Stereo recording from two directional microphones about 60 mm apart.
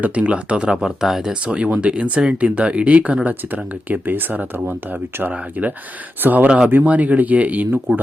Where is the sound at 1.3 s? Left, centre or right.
Centre.